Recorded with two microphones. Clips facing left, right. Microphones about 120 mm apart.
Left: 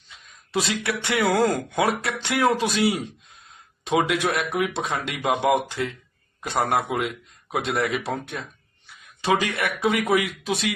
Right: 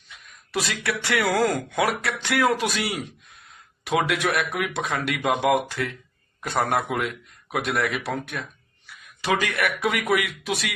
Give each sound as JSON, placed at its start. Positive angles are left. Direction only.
{"t": 0.1, "sound": "speech", "side_deg": 25}